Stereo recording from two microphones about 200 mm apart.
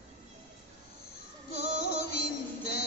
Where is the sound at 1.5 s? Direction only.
50° left (ahead or behind).